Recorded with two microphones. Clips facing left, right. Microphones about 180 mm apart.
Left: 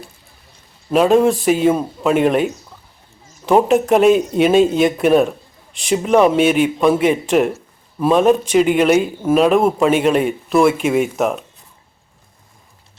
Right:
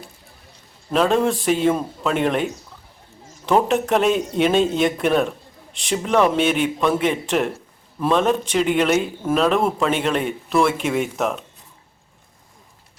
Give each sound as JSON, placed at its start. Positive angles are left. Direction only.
{"t": 0.9, "sound": "a man's voice", "side_deg": 10}